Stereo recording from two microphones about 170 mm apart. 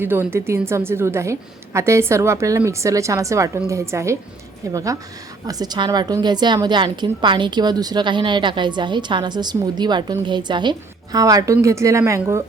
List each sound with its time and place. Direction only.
0.0 s a woman's voice: 15° right (ahead or behind)